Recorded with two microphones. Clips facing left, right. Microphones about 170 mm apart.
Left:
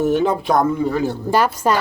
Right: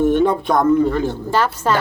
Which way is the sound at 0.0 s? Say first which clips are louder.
Right 2 dB; 5° left (ahead or behind).